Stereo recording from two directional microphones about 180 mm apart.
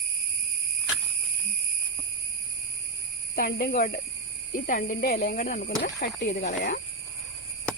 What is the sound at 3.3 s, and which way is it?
Speech, 50° left (ahead or behind).